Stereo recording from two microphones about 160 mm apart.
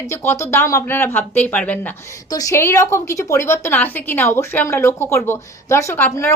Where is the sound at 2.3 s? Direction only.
20° left (ahead or behind).